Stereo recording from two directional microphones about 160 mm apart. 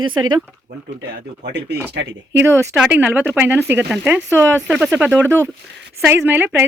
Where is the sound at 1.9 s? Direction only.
90° right.